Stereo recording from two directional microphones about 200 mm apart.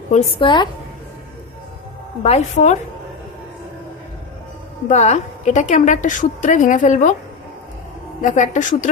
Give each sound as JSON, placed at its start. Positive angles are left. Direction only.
{"t": 0.3, "sound": "a woman's voice", "side_deg": 25}
{"t": 2.2, "sound": "a woman's voice", "side_deg": 35}
{"t": 4.9, "sound": "a woman's voice", "side_deg": 35}
{"t": 8.2, "sound": "a woman's voice", "side_deg": 40}